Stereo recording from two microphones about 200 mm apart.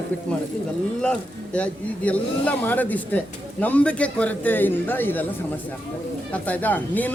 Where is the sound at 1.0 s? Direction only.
5° left (ahead or behind).